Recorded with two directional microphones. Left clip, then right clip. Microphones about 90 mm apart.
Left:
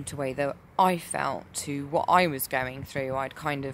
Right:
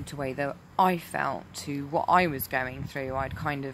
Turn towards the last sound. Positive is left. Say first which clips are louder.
# left 1 dB
turn(degrees=35)  # may be behind; listen again after turning